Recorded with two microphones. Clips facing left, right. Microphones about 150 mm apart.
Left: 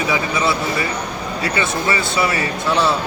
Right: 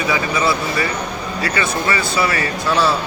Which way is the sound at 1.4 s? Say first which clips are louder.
Even; 25° left (ahead or behind).